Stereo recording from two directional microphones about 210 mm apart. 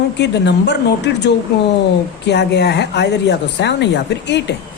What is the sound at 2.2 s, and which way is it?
A woman's voice, 55° left (ahead or behind).